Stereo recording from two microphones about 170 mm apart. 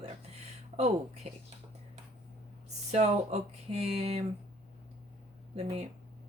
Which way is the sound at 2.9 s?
40° right (ahead or behind).